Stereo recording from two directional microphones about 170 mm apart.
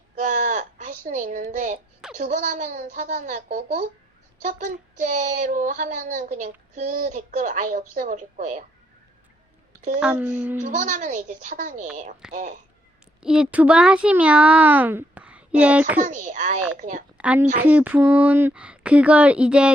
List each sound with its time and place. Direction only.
0.2 s a sound: 50° right (ahead or behind)
2.1 s speech: 50° right (ahead or behind)
10.0 s a child's voice: 5° right (ahead or behind)
10.6 s speech: 45° right (ahead or behind)
13.2 s a child's voice: 5° right (ahead or behind)
16.0 s speech: 50° right (ahead or behind)
17.2 s a woman's voice: 10° right (ahead or behind)